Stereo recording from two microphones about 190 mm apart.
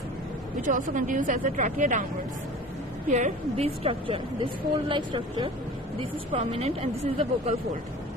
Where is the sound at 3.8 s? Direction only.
30° right (ahead or behind).